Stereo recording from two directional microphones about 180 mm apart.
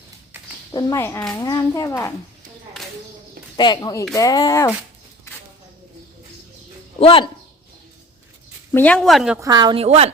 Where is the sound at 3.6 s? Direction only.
25° left (ahead or behind).